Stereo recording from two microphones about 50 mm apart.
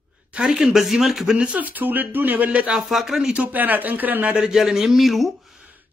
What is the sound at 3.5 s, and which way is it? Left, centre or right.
Speech, right.